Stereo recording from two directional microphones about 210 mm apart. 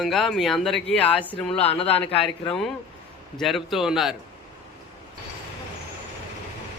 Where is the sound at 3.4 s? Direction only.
Centre (ahead or behind).